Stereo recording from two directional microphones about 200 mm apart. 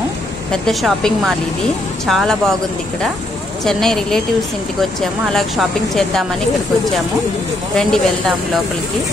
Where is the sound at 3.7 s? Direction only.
Centre (ahead or behind).